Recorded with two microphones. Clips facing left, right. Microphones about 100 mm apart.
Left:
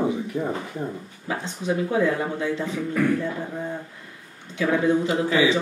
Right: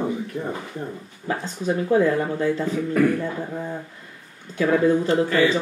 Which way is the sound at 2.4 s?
45° right (ahead or behind).